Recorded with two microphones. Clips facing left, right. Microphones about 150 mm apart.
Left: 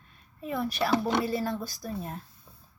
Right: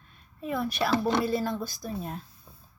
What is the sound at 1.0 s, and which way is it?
Speech, 15° left (ahead or behind).